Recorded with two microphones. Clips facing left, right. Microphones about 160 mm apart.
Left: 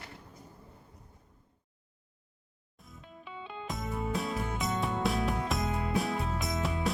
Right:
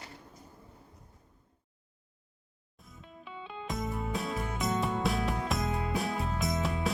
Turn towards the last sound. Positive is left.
turn(degrees=0)  # may be behind; listen again after turning